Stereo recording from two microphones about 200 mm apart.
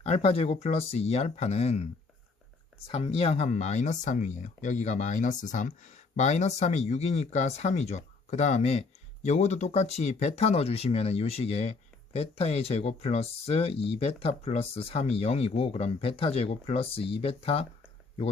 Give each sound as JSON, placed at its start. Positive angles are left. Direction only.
{"t": 0.0, "sound": "speech", "side_deg": 30}